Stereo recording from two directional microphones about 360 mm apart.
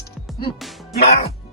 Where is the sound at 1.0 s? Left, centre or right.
Centre.